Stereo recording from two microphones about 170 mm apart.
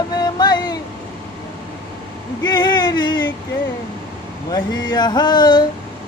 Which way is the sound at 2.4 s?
25° left (ahead or behind).